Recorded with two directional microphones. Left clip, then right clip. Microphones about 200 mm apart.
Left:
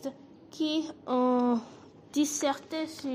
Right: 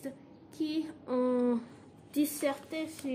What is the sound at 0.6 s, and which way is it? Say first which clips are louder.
A woman's voice: left 4 dB; 20° left (ahead or behind).